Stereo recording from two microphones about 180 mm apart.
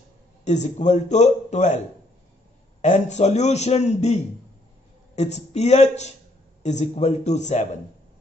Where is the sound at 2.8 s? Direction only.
40° left (ahead or behind).